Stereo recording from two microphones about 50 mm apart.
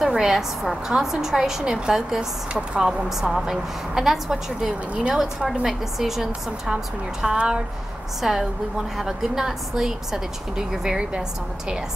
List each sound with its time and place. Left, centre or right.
0.0 s a woman's voice: centre
8.2 s a woman's voice: centre